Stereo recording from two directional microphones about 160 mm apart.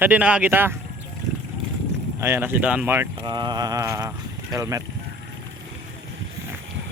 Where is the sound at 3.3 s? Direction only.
25° right (ahead or behind).